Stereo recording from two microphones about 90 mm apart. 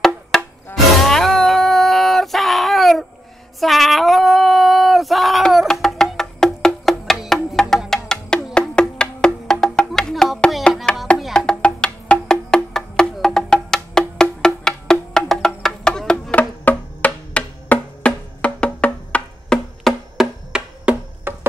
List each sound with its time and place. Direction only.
0.3 s music: 5° left (ahead or behind)
0.9 s a sound: 5° left (ahead or behind)
3.5 s female singing: centre (ahead or behind)
7.7 s music: 5° left (ahead or behind)
20.2 s music: 10° right (ahead or behind)
21.2 s music: 25° right (ahead or behind)